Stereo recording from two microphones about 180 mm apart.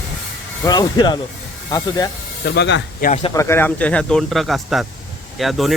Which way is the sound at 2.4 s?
70° left (ahead or behind).